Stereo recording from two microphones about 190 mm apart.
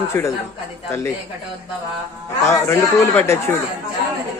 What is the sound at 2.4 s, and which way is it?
Speech, 10° left (ahead or behind).